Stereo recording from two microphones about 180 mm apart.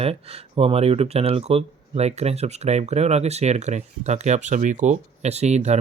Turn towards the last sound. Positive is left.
turn(degrees=-40)  # may be behind; listen again after turning